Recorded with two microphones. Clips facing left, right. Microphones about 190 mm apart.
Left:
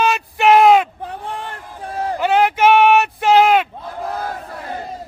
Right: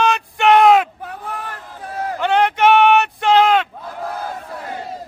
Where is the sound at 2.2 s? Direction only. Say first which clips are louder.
Left 1 dB; 5° left (ahead or behind).